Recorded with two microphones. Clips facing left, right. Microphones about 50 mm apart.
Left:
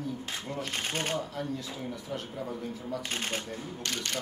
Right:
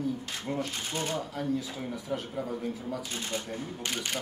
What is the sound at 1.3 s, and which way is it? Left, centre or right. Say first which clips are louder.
Speech: right 3 dB; centre.